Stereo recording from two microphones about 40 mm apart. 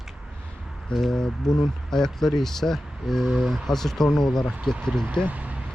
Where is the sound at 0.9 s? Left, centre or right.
Left.